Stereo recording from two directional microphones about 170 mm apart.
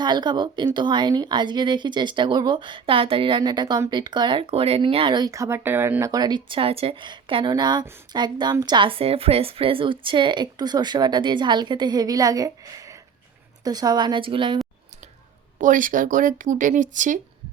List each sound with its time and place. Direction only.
0.0 s speech: 25° right (ahead or behind)
15.5 s speech: 50° right (ahead or behind)